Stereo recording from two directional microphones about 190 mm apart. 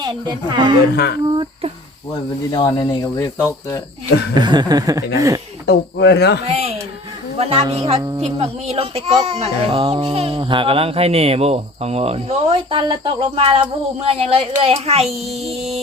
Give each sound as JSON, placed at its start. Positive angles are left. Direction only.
{"t": 0.0, "sound": "a woman's voice", "side_deg": -25}
{"t": 1.3, "sound": "a sound", "side_deg": -25}
{"t": 2.5, "sound": "speech", "side_deg": 20}
{"t": 4.4, "sound": "a woman's voice", "side_deg": -20}
{"t": 5.6, "sound": "speech", "side_deg": 65}
{"t": 6.4, "sound": "a woman's voice", "side_deg": -35}
{"t": 15.0, "sound": "a child's voice", "side_deg": 0}
{"t": 15.5, "sound": "speech", "side_deg": -35}